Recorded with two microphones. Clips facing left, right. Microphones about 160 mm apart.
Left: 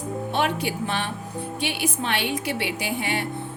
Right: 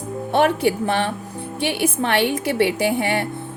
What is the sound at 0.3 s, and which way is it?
A woman's voice, 55° right (ahead or behind).